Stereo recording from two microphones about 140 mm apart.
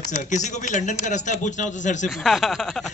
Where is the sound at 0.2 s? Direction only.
60° left (ahead or behind).